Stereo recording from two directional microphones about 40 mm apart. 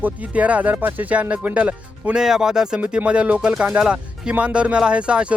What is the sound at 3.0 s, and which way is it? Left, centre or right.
Speech, right.